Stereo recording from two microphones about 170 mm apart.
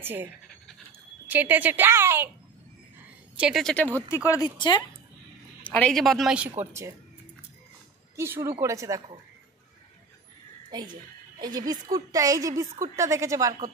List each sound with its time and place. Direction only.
0.0 s speech: 10° right (ahead or behind)
1.3 s a woman's voice: 10° right (ahead or behind)
3.3 s a woman's voice: 5° right (ahead or behind)
4.3 s speech: 25° left (ahead or behind)
5.7 s a woman's voice: 5° left (ahead or behind)
6.6 s a woman's voice: 15° right (ahead or behind)
8.2 s a woman's voice: 15° right (ahead or behind)
10.7 s a woman's voice: 25° right (ahead or behind)